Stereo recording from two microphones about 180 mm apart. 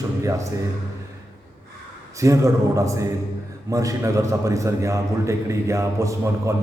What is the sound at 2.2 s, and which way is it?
A man's voice, 15° right (ahead or behind).